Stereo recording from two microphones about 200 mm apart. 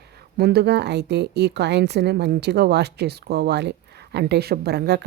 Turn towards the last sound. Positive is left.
turn(degrees=-55)  # may be behind; listen again after turning